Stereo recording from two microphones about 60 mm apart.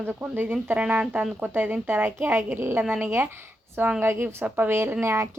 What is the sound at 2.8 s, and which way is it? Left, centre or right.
Speech, right.